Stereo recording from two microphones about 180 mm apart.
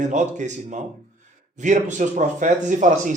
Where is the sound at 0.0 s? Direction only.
45° right (ahead or behind).